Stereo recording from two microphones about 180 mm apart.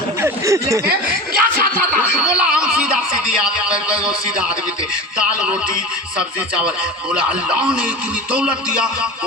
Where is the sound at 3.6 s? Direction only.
5° right (ahead or behind).